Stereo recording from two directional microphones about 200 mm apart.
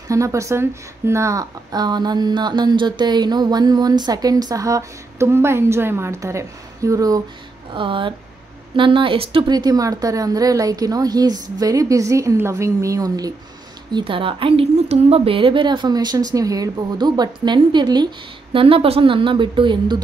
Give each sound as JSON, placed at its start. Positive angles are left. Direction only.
{"t": 0.1, "sound": "a woman's voice", "side_deg": -15}